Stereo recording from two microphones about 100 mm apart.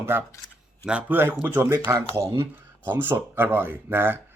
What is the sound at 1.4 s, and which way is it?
Speech, 25° right (ahead or behind).